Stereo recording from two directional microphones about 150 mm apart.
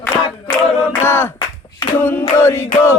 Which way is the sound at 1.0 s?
15° left (ahead or behind).